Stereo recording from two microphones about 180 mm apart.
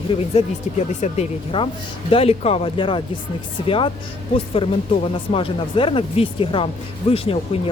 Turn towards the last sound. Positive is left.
turn(degrees=35)  # may be behind; listen again after turning